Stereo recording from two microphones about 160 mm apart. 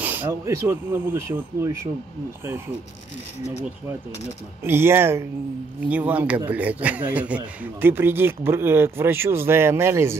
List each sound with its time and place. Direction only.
0.0 s speech: 10° right (ahead or behind)
4.6 s speech: 15° right (ahead or behind)